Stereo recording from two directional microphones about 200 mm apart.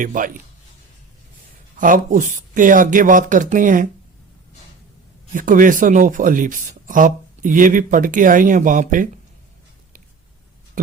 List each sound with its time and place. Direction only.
0.0 s speech: 40° right (ahead or behind)
1.8 s speech: 40° right (ahead or behind)
5.3 s speech: 40° right (ahead or behind)